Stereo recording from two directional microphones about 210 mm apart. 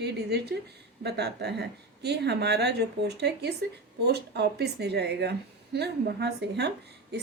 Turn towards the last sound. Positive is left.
turn(degrees=-50)  # may be behind; listen again after turning